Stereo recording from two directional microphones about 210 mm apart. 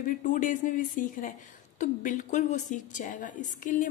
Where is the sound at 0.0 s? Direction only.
40° left (ahead or behind).